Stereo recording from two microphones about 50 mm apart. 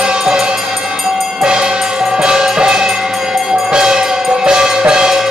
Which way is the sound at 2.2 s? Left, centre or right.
Centre.